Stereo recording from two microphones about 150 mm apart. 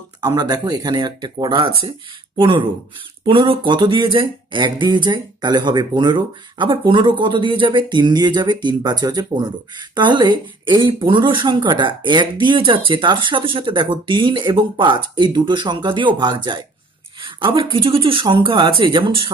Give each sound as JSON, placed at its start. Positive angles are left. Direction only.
{"t": 0.2, "sound": "speech", "side_deg": -25}